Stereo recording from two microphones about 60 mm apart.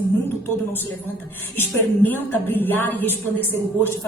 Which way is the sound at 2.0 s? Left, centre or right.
Left.